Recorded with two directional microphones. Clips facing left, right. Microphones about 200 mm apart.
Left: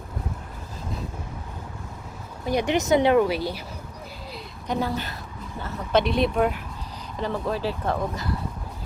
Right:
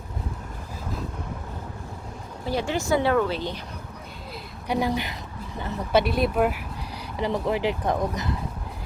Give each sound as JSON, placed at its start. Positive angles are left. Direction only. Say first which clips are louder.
{"t": 2.5, "sound": "a woman's voice", "louder": "left 3 dB", "side_deg": 15}
{"t": 4.7, "sound": "speech", "louder": "right 2 dB", "side_deg": -15}